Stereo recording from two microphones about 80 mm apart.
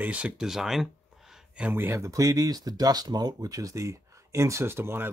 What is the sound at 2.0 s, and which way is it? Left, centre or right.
Speech, right.